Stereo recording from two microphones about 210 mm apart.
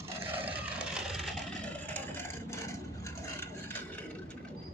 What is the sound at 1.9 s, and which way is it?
Vehicle, 10° left (ahead or behind).